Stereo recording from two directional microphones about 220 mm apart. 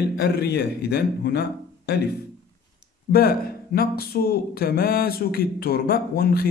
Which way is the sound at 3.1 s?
45° left (ahead or behind).